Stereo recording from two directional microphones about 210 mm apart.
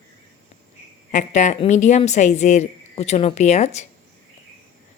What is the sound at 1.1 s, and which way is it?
A woman's voice, 35° left (ahead or behind).